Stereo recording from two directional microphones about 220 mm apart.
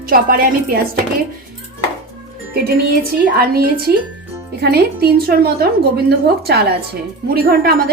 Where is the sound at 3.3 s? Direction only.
45° right (ahead or behind).